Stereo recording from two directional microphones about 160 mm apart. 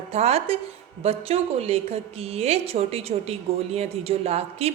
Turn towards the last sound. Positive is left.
turn(degrees=-40)  # may be behind; listen again after turning